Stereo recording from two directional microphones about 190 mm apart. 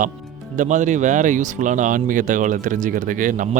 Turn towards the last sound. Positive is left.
turn(degrees=-45)  # may be behind; listen again after turning